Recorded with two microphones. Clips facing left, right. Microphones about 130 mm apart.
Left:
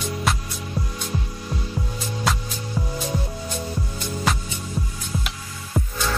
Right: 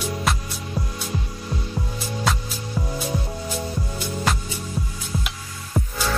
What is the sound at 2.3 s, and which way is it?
Music, centre (ahead or behind).